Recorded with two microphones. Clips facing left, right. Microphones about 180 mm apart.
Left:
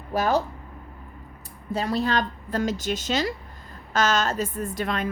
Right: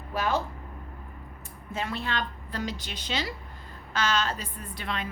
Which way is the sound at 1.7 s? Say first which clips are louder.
Left 8 dB; 35° left (ahead or behind).